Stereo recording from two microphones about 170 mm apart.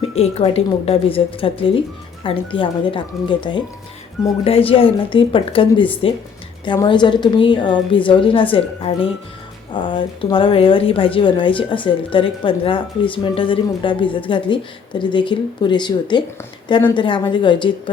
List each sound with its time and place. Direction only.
0.2 s speech: 35° left (ahead or behind)